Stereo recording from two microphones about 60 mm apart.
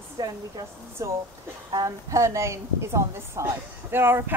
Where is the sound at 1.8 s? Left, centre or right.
Right.